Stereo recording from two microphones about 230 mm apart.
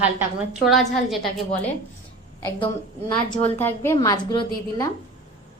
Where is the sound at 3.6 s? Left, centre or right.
Centre.